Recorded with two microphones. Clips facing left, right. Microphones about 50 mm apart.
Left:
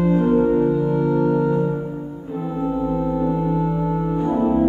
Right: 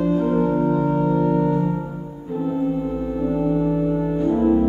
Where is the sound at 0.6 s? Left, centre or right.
Right.